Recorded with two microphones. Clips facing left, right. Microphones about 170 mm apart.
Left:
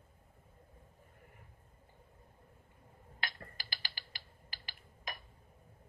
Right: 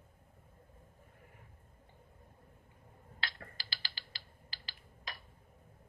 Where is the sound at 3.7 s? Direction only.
15° left (ahead or behind).